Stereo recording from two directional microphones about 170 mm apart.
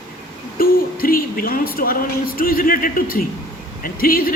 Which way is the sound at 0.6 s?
55° left (ahead or behind).